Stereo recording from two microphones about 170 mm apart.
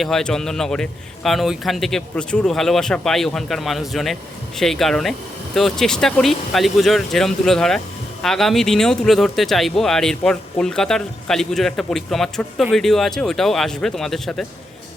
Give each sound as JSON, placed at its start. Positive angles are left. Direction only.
{"t": 0.0, "sound": "a man's voice", "side_deg": 5}